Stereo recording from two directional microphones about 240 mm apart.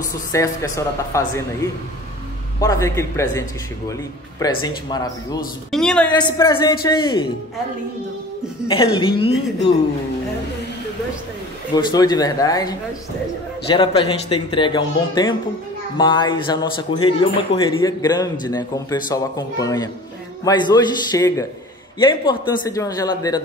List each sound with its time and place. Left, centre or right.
0.3 s speech: centre
5.7 s a woman's voice: centre
6.1 s speech: centre
8.6 s speech: left
11.7 s speech: centre